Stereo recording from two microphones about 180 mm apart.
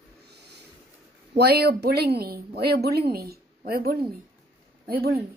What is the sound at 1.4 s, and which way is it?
Speech, 65° right (ahead or behind).